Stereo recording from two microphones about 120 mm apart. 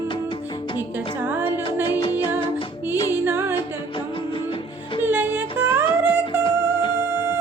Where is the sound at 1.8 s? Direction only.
35° left (ahead or behind).